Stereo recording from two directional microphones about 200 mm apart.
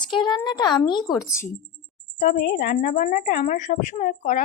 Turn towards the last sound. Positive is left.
turn(degrees=40)  # may be behind; listen again after turning